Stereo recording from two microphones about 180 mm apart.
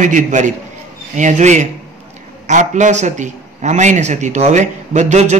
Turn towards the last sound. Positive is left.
turn(degrees=-40)  # may be behind; listen again after turning